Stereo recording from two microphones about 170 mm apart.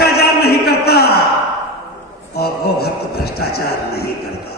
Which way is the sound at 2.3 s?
65° left (ahead or behind).